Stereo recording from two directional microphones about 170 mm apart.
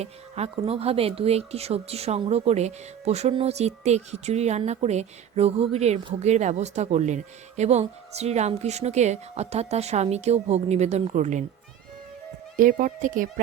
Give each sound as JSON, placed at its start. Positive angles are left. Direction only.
{"t": 0.0, "sound": "speech", "side_deg": -35}
{"t": 12.5, "sound": "speech", "side_deg": -50}